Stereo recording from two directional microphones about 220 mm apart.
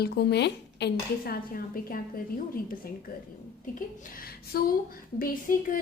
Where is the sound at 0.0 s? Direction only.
45° left (ahead or behind).